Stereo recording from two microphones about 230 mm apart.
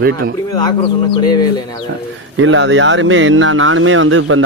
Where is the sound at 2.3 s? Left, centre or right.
Right.